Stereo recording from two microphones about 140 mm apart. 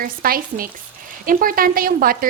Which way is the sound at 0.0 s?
90° right.